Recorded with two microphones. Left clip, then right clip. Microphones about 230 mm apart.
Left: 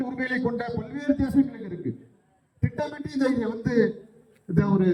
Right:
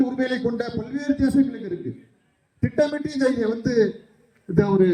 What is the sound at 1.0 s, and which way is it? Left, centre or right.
Speech, right.